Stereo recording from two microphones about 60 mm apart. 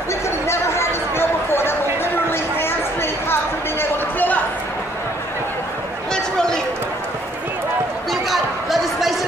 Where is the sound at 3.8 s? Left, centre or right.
Left.